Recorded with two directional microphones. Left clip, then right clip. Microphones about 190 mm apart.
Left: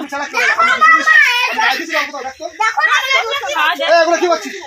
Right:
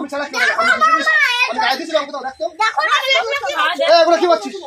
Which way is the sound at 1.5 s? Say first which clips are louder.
Left 3 dB; 5° right (ahead or behind).